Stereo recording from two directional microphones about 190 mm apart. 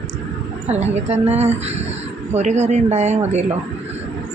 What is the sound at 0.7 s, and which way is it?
A woman's voice, 35° right (ahead or behind).